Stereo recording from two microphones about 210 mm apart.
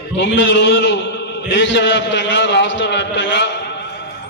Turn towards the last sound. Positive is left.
turn(degrees=55)  # may be behind; listen again after turning